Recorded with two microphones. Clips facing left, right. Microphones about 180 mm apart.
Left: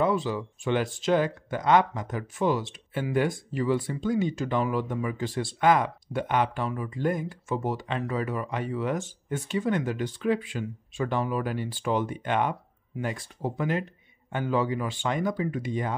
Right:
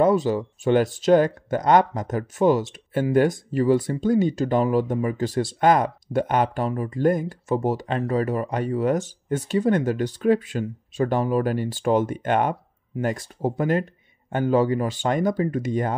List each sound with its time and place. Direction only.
0.0 s speech: 40° right (ahead or behind)